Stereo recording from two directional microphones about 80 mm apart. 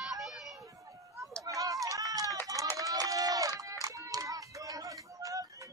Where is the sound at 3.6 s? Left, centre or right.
Right.